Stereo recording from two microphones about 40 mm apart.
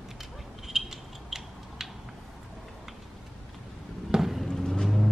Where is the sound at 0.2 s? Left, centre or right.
Centre.